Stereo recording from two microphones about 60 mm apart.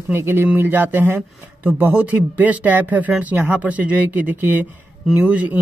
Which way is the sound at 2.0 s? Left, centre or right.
Right.